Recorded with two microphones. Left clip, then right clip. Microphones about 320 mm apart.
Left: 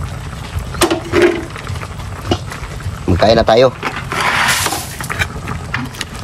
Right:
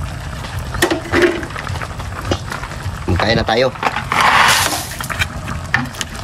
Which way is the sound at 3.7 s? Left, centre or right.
Centre.